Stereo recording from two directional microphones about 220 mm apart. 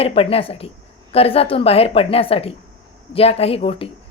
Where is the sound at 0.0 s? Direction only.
25° left (ahead or behind).